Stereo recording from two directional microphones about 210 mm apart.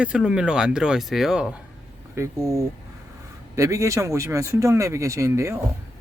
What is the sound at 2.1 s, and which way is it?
Speech, 15° right (ahead or behind).